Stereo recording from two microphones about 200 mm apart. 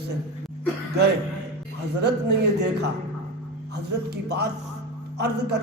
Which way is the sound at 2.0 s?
55° right (ahead or behind).